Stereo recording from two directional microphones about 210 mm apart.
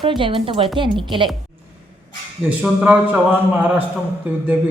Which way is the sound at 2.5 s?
5° right (ahead or behind).